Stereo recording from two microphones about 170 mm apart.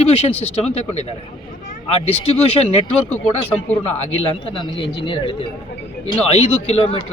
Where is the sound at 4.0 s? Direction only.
30° left (ahead or behind).